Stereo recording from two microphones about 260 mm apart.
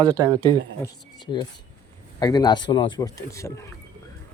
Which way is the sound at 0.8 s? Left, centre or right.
Centre.